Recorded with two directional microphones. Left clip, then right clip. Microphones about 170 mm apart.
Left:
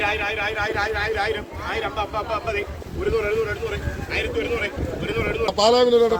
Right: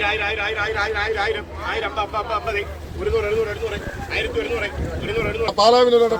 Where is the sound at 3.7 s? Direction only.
15° left (ahead or behind).